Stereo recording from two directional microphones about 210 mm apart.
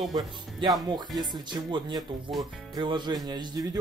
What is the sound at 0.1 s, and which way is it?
Speech, 20° right (ahead or behind).